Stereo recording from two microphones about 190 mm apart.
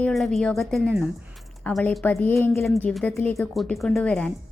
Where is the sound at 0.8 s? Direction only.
10° right (ahead or behind).